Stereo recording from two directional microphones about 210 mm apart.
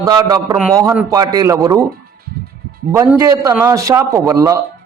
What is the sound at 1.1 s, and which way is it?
Speech, 15° right (ahead or behind).